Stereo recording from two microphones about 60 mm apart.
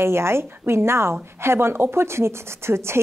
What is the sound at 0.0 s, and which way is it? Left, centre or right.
Speech, right.